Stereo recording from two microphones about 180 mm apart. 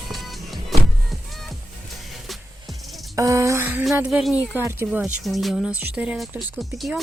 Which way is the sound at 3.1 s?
15° right (ahead or behind).